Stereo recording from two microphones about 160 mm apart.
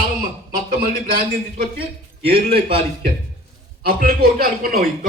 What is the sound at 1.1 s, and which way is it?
Speech, 70° right (ahead or behind).